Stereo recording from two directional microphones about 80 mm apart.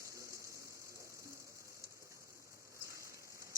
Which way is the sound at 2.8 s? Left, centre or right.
Right.